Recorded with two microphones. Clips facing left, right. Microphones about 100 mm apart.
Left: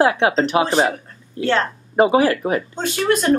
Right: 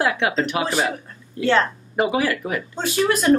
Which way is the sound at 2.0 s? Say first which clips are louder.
Left 6 dB; 30° left (ahead or behind).